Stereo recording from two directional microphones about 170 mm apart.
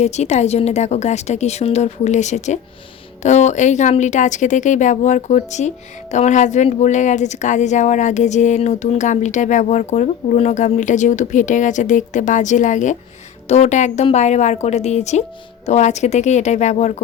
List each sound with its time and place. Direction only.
0.0 s a woman's voice: 40° left (ahead or behind)